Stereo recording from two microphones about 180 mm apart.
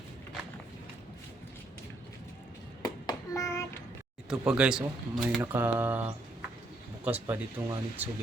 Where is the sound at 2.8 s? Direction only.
20° left (ahead or behind).